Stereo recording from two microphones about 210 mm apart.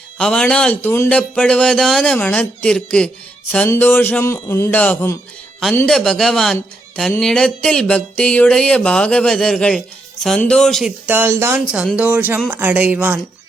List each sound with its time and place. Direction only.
0.2 s a man's voice: 5° left (ahead or behind)